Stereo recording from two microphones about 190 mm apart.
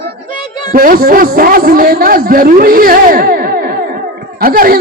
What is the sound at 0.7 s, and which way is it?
A woman's voice, 50° right (ahead or behind).